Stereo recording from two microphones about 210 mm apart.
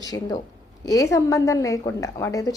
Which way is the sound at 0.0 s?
20° left (ahead or behind).